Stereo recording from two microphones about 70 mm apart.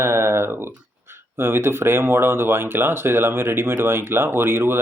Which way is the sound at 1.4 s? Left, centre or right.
Right.